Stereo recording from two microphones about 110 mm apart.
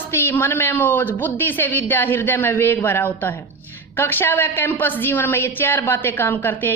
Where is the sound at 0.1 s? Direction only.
20° left (ahead or behind).